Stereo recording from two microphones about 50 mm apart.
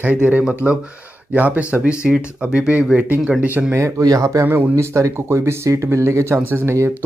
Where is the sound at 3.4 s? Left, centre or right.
Right.